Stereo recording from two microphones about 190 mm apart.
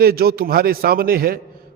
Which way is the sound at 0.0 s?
55° right (ahead or behind).